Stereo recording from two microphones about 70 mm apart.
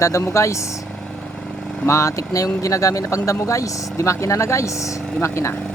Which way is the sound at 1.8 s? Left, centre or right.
Left.